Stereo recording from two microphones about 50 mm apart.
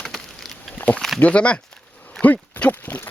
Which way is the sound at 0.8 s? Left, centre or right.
Left.